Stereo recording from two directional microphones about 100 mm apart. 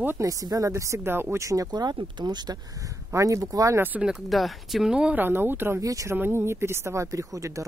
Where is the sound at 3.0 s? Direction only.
30° right (ahead or behind).